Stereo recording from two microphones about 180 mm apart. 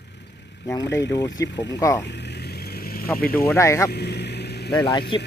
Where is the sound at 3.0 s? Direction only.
10° left (ahead or behind).